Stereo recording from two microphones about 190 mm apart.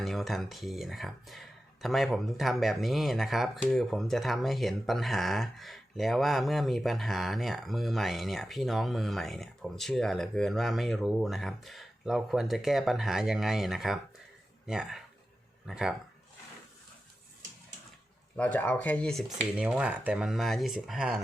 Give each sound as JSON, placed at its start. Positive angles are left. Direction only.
{"t": 0.0, "sound": "speech", "side_deg": 0}
{"t": 18.3, "sound": "speech", "side_deg": 10}